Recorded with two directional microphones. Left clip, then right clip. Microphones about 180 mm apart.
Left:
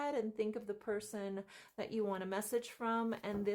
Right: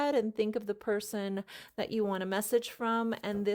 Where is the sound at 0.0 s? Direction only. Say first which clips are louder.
Right 8 dB; 50° right (ahead or behind).